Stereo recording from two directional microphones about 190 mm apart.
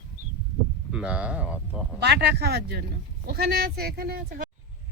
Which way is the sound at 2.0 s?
60° right (ahead or behind).